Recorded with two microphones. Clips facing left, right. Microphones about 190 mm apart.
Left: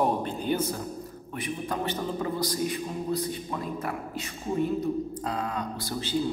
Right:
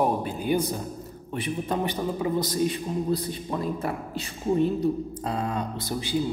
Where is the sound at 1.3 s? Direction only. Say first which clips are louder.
Right 4 dB; 30° right (ahead or behind).